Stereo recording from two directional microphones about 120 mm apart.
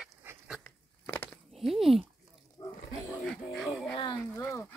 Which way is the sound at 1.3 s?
Centre (ahead or behind).